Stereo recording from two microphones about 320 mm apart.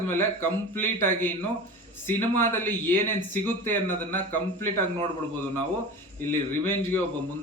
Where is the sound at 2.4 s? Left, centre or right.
Centre.